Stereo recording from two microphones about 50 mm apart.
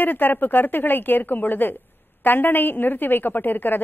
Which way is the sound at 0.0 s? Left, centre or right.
Left.